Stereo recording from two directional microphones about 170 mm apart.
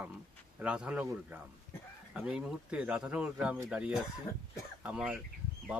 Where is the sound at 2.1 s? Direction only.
5° right (ahead or behind).